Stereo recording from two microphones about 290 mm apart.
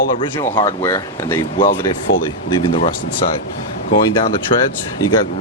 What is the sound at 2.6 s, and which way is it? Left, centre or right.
Speech, centre.